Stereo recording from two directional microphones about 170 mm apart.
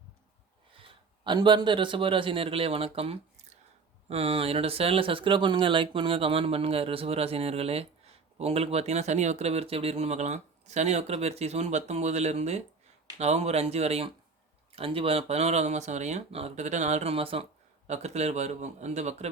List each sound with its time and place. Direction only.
0.8 s a man's voice: 30° right (ahead or behind)